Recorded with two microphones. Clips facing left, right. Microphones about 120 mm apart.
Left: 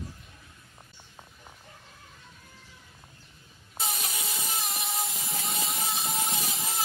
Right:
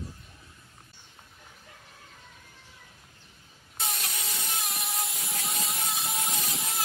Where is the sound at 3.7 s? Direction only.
5° left (ahead or behind).